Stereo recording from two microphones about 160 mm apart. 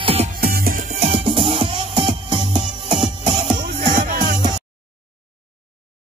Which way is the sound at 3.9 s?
60° right (ahead or behind).